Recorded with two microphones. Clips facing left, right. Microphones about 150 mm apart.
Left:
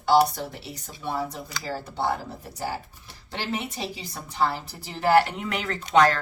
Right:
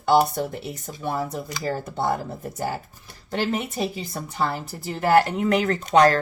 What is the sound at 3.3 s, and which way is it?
Speech, 50° right (ahead or behind).